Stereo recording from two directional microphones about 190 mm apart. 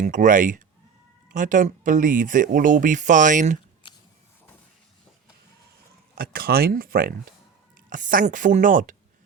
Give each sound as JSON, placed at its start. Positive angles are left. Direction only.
{"t": 0.0, "sound": "speech", "side_deg": -40}
{"t": 6.1, "sound": "speech", "side_deg": -50}